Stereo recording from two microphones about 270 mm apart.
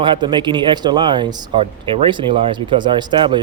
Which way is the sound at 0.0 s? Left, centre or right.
Centre.